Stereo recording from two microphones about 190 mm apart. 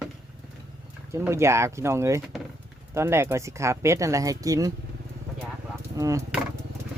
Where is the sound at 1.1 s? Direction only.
15° right (ahead or behind).